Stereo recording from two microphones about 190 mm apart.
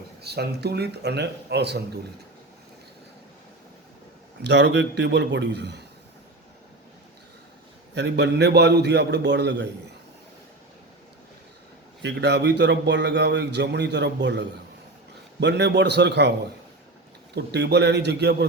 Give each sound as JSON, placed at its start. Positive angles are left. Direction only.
{"t": 0.2, "sound": "a man's voice", "side_deg": -60}
{"t": 4.4, "sound": "a man's voice", "side_deg": -65}
{"t": 7.9, "sound": "a man's voice", "side_deg": -65}
{"t": 12.0, "sound": "a man's voice", "side_deg": -60}
{"t": 17.3, "sound": "a man's voice", "side_deg": -60}